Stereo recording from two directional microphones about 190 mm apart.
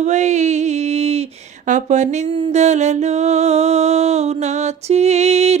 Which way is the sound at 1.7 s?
40° right (ahead or behind).